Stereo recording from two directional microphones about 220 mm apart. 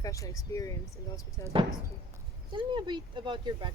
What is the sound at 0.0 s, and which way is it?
Speech, 15° left (ahead or behind).